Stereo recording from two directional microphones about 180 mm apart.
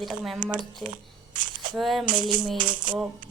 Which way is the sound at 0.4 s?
50° right (ahead or behind).